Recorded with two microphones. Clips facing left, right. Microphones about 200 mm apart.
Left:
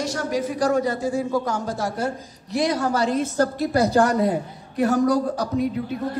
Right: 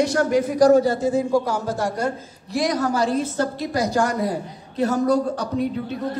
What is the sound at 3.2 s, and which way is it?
A woman's voice, 40° left (ahead or behind).